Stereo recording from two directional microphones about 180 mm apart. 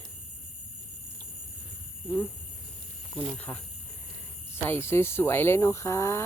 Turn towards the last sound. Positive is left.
turn(degrees=15)  # may be behind; listen again after turning